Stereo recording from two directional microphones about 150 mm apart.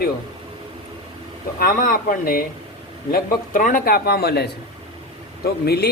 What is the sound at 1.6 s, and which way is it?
Speech, 65° left (ahead or behind).